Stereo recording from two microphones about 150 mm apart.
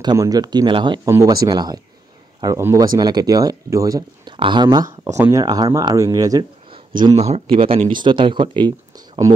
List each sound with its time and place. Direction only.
0.0 s speech: 25° right (ahead or behind)
1.0 s speech: 20° right (ahead or behind)
7.2 s speech: 45° right (ahead or behind)